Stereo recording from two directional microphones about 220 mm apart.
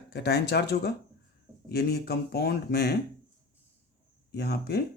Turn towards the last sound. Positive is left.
turn(degrees=45)  # may be behind; listen again after turning